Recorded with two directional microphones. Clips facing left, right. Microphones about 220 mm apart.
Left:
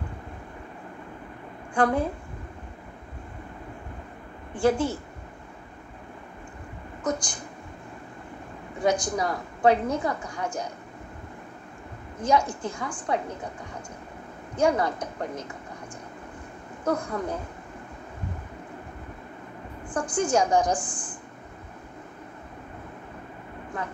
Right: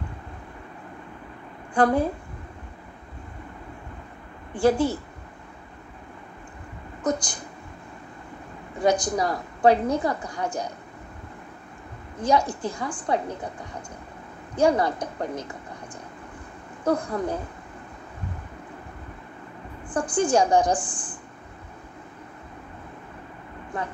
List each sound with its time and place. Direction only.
1.8 s a woman's voice: 35° right (ahead or behind)
4.6 s a woman's voice: 35° right (ahead or behind)
7.0 s a woman's voice: 35° right (ahead or behind)
8.8 s a woman's voice: 35° right (ahead or behind)
12.2 s a woman's voice: 35° right (ahead or behind)
14.6 s a woman's voice: 35° right (ahead or behind)
16.8 s a woman's voice: 35° right (ahead or behind)
19.9 s a woman's voice: 30° right (ahead or behind)
23.7 s speech: 30° right (ahead or behind)